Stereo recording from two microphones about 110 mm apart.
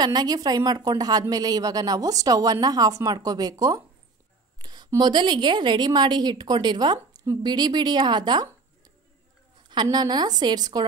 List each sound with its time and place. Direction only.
0.0 s speech: 40° right (ahead or behind)
9.6 s speech: 40° right (ahead or behind)